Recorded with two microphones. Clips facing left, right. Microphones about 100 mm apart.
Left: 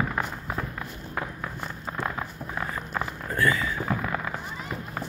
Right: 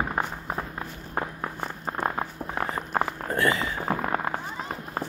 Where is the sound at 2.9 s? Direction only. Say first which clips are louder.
Right 4 dB; 45° right (ahead or behind).